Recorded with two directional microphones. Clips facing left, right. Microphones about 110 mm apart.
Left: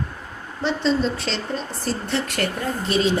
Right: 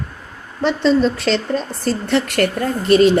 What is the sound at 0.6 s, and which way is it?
Speech, 70° right (ahead or behind).